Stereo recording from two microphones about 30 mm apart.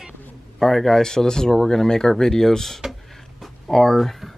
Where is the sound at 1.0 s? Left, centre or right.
Centre.